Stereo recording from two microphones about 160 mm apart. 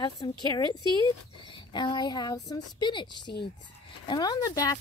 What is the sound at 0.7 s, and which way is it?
Speech, 30° right (ahead or behind).